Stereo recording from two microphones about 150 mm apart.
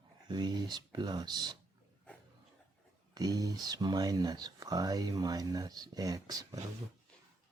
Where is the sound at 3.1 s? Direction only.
25° right (ahead or behind).